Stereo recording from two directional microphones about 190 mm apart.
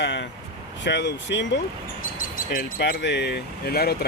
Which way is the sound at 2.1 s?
45° left (ahead or behind).